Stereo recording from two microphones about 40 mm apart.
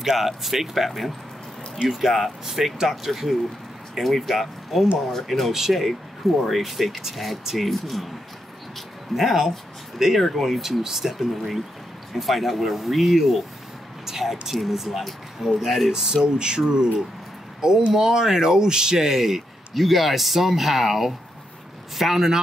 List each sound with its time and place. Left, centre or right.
0.0 s speech: centre
9.1 s speech: centre